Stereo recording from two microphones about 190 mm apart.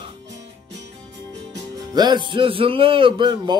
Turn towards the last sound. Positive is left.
turn(degrees=-25)  # may be behind; listen again after turning